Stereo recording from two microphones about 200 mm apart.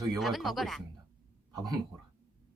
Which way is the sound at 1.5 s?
20° right (ahead or behind).